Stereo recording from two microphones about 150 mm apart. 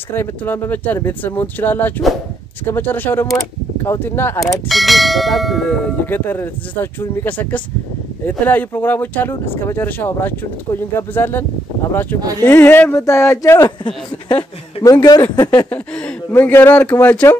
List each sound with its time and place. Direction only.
0.1 s speech: 15° left (ahead or behind)
4.6 s bell: centre (ahead or behind)
8.3 s speech: 10° left (ahead or behind)
14.8 s speech: 25° left (ahead or behind)
15.7 s speech: 5° left (ahead or behind)